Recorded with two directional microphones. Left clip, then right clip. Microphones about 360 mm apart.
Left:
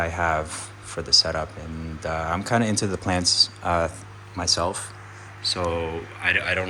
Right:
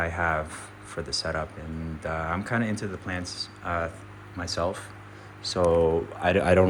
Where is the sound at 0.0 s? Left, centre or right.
Centre.